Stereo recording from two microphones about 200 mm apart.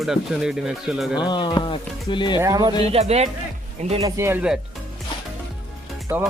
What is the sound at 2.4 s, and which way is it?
Speech, 15° right (ahead or behind).